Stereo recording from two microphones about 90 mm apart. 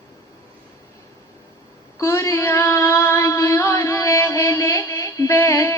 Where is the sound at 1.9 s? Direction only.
35° left (ahead or behind).